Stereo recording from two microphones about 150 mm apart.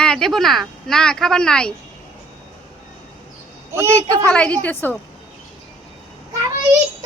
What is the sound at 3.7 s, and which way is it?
Speech, 15° right (ahead or behind).